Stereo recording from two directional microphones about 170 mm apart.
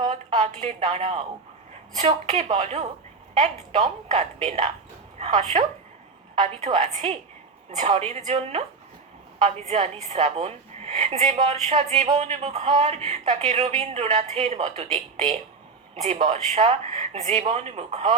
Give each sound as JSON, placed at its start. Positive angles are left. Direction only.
{"t": 0.0, "sound": "a sound", "side_deg": -45}
{"t": 0.9, "sound": "a woman's voice", "side_deg": -40}
{"t": 6.7, "sound": "speech", "side_deg": -40}